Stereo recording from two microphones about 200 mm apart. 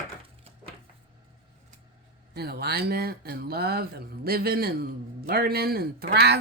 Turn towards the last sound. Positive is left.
turn(degrees=-55)  # may be behind; listen again after turning